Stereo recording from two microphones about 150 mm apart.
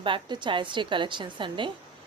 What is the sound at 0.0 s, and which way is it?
A woman's voice, 30° right (ahead or behind).